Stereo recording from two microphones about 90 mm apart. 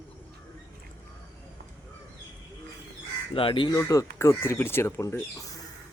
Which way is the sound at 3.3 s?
85° left.